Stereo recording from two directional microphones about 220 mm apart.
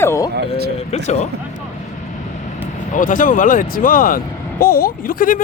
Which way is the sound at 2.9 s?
35° left (ahead or behind).